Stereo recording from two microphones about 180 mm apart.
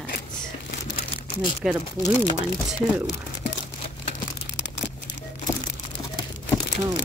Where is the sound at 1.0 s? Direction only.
35° left (ahead or behind).